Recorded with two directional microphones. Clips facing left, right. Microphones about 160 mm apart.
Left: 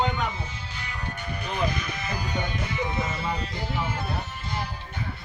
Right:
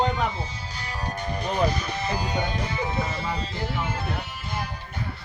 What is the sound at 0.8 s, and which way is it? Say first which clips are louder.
Speech: right 5 dB; 35° right (ahead or behind).